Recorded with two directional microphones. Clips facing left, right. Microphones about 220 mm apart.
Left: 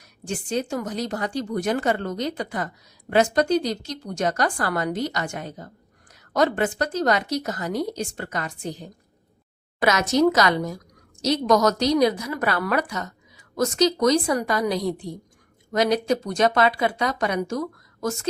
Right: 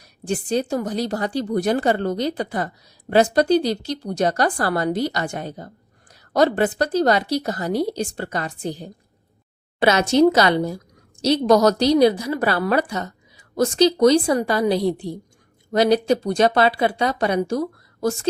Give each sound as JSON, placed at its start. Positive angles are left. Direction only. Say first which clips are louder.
{"t": 0.0, "sound": "speech", "louder": "right 6 dB", "side_deg": -35}